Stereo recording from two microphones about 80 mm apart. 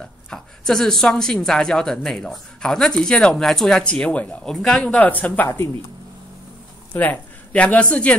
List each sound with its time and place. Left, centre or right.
0.3 s speech: centre
4.6 s speech: centre
4.9 s speech: centre
6.9 s speech: left